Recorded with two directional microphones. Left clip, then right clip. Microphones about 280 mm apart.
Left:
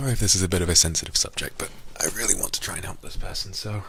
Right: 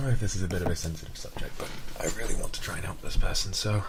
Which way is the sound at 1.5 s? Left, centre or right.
Left.